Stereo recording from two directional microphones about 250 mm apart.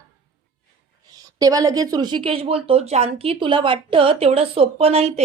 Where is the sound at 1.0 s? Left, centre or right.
Centre.